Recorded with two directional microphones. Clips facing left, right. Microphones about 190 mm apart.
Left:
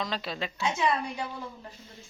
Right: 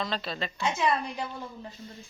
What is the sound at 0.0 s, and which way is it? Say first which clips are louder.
Speech: right 1 dB; 10° left (ahead or behind).